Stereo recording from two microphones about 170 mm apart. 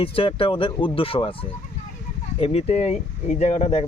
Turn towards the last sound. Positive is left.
turn(degrees=40)  # may be behind; listen again after turning